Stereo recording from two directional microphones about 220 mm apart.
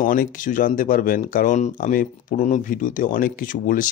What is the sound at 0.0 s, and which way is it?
Speech, 40° left (ahead or behind).